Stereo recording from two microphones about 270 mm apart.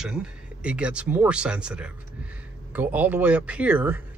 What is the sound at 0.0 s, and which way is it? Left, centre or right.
Speech, centre.